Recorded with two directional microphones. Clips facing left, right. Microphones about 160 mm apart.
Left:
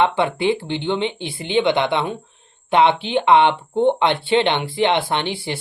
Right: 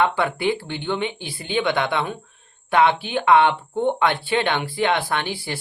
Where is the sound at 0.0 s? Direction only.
25° left (ahead or behind).